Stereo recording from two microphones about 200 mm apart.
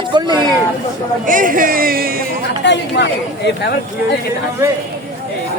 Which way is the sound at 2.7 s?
60° left (ahead or behind).